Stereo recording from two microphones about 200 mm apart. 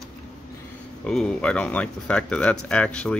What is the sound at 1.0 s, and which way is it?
Speech, 5° left (ahead or behind).